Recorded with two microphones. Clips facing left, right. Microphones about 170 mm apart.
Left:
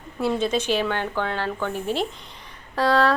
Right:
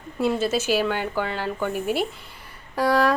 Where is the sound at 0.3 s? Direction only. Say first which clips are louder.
Left 1 dB; 5° right (ahead or behind).